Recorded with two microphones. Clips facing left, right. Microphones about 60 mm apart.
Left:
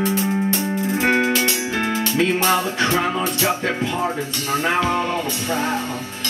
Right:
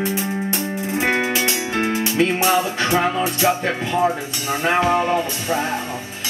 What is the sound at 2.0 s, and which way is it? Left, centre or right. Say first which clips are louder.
Music: even; centre.